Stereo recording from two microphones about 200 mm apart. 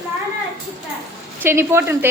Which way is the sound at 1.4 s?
10° right (ahead or behind).